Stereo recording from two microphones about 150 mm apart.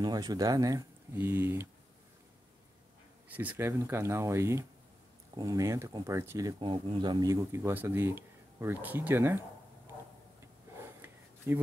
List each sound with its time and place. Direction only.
0.0 s speech: 25° right (ahead or behind)
3.3 s speech: 10° right (ahead or behind)
11.0 s a sound: 15° right (ahead or behind)